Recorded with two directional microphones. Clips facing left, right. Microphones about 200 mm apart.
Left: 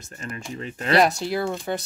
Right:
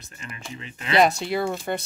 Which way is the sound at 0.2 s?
45° left (ahead or behind).